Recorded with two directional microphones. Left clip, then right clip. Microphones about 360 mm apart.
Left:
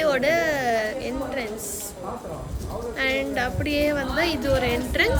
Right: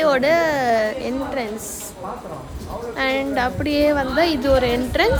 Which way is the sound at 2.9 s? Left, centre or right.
Centre.